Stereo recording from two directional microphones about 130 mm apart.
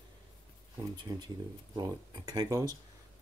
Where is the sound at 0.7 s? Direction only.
30° right (ahead or behind).